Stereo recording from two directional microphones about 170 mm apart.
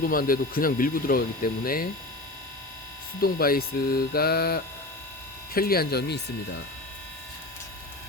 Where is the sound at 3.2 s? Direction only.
60° left (ahead or behind); by 6.2 s 75° left (ahead or behind).